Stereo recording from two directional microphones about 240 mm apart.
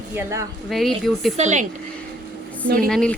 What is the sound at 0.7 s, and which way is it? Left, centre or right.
Speech, centre.